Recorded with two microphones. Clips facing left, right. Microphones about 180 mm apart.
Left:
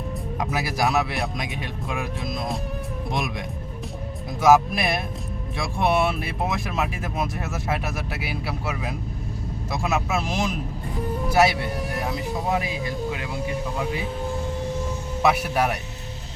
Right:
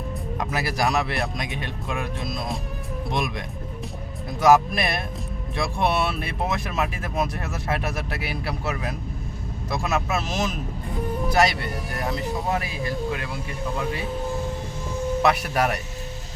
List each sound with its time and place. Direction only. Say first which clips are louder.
0.3 s speech: even; 5° left (ahead or behind)
4.4 s speech: even; 5° left (ahead or behind)
12.5 s speech: left 3 dB; 15° left (ahead or behind)
15.2 s speech: left 2 dB; 5° left (ahead or behind)